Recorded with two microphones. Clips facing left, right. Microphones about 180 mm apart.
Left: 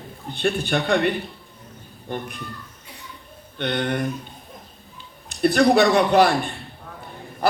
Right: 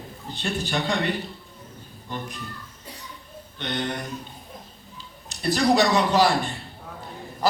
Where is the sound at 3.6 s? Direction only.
60° left (ahead or behind).